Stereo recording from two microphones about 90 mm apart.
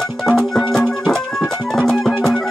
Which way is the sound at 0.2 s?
5° left (ahead or behind).